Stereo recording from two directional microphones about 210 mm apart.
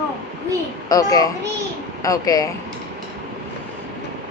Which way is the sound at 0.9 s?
15° left (ahead or behind).